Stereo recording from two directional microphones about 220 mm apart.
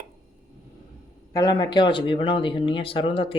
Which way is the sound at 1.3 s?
20° left (ahead or behind).